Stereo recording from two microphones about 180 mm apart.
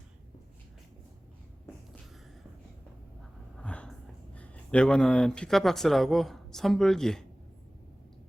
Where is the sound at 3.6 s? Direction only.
5° left (ahead or behind).